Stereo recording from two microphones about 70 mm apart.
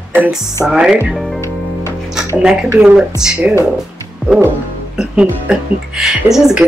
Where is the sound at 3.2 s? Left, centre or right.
Centre.